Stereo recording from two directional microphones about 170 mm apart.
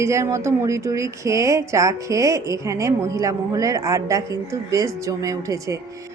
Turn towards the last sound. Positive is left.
turn(degrees=-20)  # may be behind; listen again after turning